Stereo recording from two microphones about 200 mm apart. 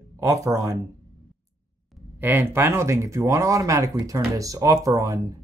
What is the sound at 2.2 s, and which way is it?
Speech, 10° right (ahead or behind).